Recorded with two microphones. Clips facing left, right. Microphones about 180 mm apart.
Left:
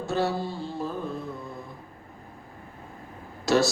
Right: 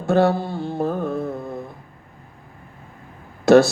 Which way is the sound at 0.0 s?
55° right (ahead or behind).